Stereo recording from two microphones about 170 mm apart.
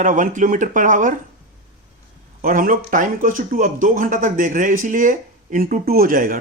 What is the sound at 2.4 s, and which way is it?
Speech, 55° right (ahead or behind).